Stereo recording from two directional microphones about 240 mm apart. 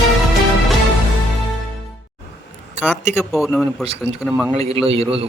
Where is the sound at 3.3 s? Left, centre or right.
Centre.